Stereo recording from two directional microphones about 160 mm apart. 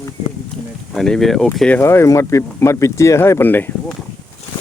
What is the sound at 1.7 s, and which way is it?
Speech, 15° left (ahead or behind).